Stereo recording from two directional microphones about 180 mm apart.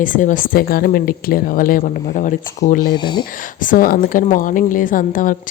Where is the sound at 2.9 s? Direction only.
25° left (ahead or behind).